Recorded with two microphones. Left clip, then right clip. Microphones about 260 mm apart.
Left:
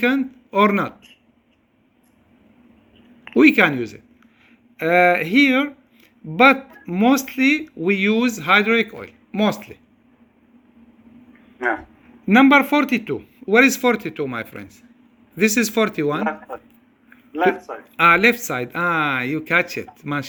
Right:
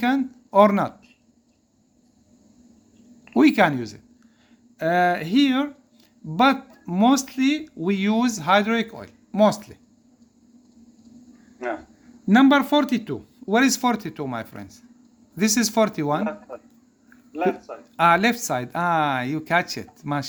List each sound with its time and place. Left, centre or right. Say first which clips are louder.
0.0 s speech: left 3 dB; right
3.3 s speech: left 4 dB; right
4.8 s a sound: left 5 dB; centre
6.2 s speech: left 5 dB; centre
11.6 s a man's voice: left 7 dB; left
12.8 s speech: left 4 dB; centre
16.2 s a man's voice: left 5 dB; left
17.9 s speech: left 4 dB; right